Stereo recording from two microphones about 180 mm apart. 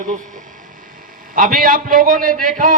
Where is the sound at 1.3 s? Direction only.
50° right (ahead or behind).